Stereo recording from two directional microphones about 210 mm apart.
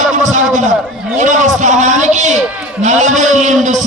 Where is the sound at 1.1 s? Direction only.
35° right (ahead or behind).